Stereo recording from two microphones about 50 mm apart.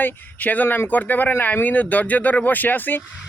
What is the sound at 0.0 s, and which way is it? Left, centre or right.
Speech, left.